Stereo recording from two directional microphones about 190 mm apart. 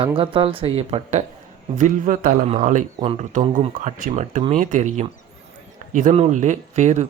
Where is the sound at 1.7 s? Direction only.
45° right (ahead or behind).